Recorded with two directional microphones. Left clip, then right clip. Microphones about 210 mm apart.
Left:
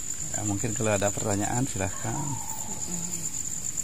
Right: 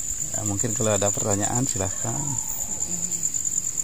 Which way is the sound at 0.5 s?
35° right (ahead or behind).